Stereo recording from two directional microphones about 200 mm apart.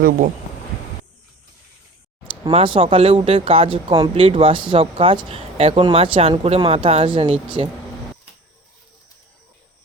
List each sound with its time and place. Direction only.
2.2 s speech: 25° right (ahead or behind)